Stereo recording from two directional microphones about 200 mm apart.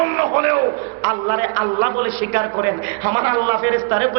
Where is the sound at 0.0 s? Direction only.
20° right (ahead or behind).